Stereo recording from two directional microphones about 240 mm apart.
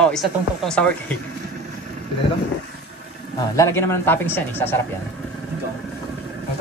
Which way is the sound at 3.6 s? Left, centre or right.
Centre.